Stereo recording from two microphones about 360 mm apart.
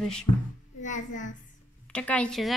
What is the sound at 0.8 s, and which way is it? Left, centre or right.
Speech, left.